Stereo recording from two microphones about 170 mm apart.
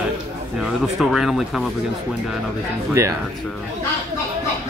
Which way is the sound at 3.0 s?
20° right (ahead or behind).